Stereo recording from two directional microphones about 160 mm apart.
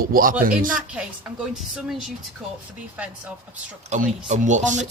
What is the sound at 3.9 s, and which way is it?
Speech, 50° right (ahead or behind).